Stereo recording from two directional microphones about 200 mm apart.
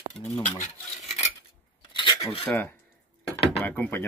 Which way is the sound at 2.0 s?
25° left (ahead or behind).